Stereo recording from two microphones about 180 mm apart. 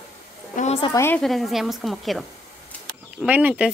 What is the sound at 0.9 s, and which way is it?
Speech, 10° left (ahead or behind).